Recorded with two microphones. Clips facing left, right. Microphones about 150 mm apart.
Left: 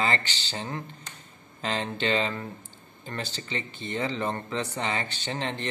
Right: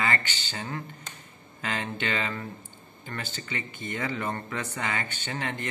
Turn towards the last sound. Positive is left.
turn(degrees=30)  # may be behind; listen again after turning